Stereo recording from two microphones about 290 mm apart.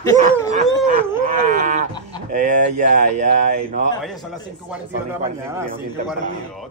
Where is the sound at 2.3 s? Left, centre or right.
Right.